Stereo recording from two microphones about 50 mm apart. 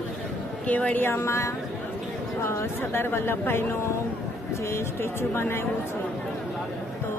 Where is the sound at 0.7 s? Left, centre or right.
Left.